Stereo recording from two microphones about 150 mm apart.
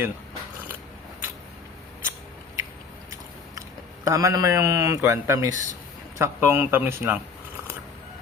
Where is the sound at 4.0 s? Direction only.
20° right (ahead or behind).